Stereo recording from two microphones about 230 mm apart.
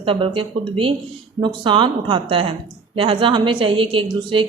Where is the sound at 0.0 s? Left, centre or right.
Right.